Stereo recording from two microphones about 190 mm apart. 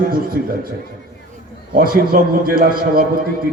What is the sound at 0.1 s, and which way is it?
Speech, 50° right (ahead or behind).